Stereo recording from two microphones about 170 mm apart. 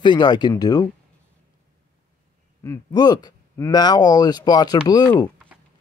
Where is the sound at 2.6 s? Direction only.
25° left (ahead or behind).